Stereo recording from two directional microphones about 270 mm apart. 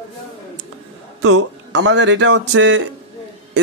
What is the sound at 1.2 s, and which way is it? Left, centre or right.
Speech, right.